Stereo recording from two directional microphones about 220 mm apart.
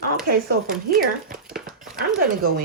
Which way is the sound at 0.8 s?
40° right (ahead or behind).